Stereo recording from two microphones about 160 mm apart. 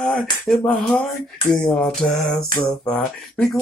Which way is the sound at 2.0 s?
Centre (ahead or behind).